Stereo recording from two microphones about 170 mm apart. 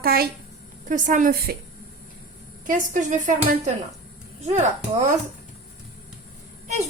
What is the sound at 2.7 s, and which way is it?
A woman's voice, 50° right (ahead or behind).